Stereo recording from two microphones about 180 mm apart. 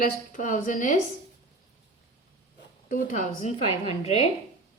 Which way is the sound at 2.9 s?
45° left (ahead or behind).